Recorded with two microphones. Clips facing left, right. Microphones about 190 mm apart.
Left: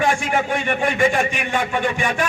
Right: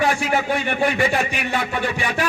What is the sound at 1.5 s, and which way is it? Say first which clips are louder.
Speech: left 3 dB; 35° right (ahead or behind).